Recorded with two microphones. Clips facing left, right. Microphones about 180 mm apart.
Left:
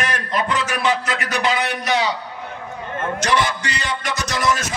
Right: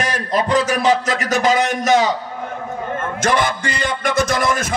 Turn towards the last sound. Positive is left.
turn(degrees=-55)  # may be behind; listen again after turning